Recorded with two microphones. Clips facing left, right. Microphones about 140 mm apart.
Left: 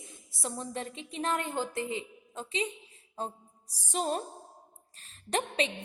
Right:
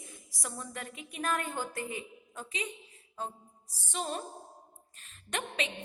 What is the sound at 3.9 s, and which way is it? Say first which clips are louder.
A woman's voice: left 5 dB; 40° left (ahead or behind).